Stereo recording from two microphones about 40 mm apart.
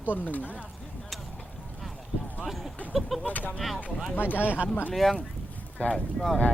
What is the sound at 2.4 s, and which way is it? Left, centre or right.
Speech, centre.